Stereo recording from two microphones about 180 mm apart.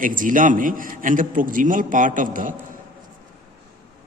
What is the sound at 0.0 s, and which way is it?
A man's voice, 50° right (ahead or behind).